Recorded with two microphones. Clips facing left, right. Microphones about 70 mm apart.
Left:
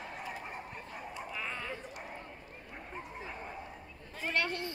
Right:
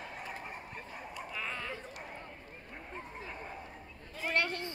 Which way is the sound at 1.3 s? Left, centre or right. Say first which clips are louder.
Right 1 dB; centre.